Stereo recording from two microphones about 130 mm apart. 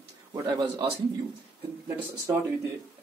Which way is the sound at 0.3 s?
30° right (ahead or behind).